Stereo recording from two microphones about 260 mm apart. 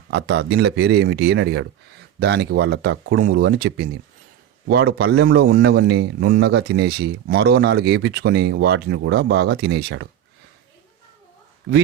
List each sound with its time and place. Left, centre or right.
0.1 s speech: right